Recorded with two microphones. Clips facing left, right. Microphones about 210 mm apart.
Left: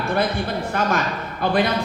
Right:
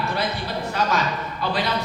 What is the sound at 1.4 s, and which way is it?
Speech, 50° left (ahead or behind).